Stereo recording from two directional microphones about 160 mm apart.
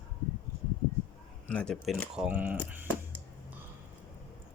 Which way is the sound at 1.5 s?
5° left (ahead or behind).